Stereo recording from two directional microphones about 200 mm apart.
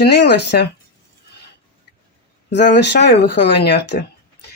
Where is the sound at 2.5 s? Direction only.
60° left (ahead or behind).